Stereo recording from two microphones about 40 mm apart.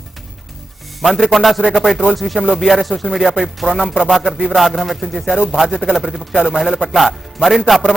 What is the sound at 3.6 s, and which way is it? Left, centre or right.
Speech, centre.